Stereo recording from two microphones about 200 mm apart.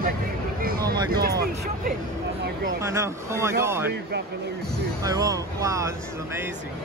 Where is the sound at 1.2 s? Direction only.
50° right (ahead or behind).